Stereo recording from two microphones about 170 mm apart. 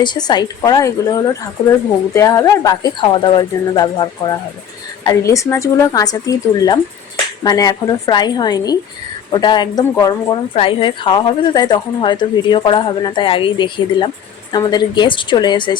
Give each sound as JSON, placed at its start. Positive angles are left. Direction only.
{"t": 0.0, "sound": "speech", "side_deg": 25}